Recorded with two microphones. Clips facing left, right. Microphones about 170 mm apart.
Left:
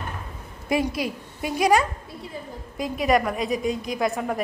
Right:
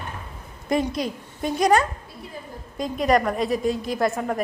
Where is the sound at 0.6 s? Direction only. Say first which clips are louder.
Right 1 dB; 5° left (ahead or behind).